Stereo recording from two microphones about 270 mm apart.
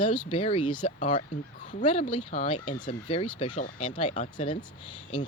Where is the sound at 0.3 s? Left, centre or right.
Left.